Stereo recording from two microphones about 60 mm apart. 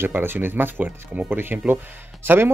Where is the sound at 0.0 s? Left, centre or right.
Right.